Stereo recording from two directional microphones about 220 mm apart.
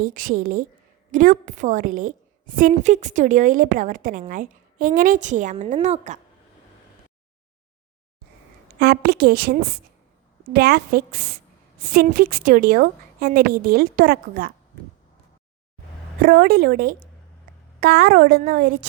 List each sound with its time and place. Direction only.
0.0 s a woman's voice: 40° right (ahead or behind)
8.8 s a woman's voice: 45° right (ahead or behind)
16.2 s a woman's voice: 40° right (ahead or behind)